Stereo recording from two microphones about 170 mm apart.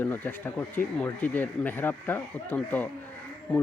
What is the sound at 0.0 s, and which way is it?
Speech, 10° left (ahead or behind).